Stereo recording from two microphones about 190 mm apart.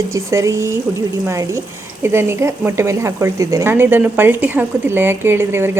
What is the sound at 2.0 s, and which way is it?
A woman's voice, 10° right (ahead or behind).